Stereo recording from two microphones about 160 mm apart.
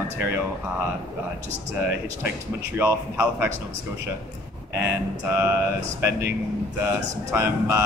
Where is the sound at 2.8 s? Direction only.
15° right (ahead or behind).